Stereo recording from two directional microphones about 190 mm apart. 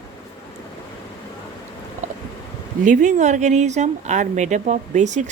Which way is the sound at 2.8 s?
40° right (ahead or behind).